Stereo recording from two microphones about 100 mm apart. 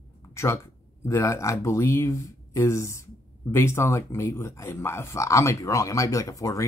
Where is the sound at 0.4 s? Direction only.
25° left (ahead or behind).